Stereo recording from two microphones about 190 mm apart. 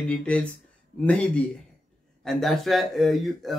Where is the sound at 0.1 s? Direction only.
5° left (ahead or behind).